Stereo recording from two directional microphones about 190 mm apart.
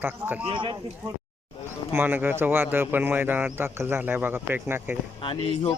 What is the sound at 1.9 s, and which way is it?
Speech, 10° right (ahead or behind).